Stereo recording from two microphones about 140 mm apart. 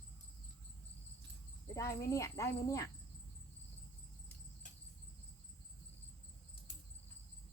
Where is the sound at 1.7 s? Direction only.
25° left (ahead or behind).